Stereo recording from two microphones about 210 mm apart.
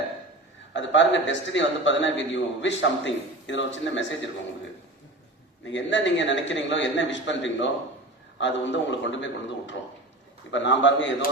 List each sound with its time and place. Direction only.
0.7 s a man's voice: 60° left (ahead or behind)
5.7 s a man's voice: 60° left (ahead or behind)